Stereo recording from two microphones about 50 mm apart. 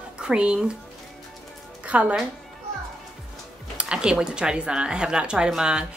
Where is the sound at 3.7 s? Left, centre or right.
Centre.